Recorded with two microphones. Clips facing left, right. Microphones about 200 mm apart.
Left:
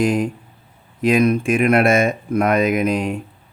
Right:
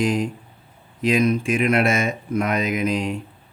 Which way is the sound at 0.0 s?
50° left (ahead or behind).